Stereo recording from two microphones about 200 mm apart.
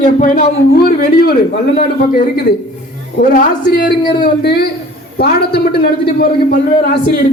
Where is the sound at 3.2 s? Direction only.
45° left (ahead or behind).